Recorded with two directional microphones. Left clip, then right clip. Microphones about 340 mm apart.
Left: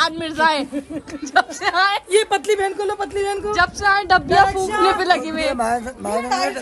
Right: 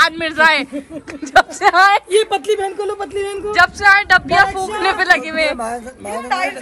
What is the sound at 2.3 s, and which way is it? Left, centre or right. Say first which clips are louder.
Speech: right 1 dB; centre.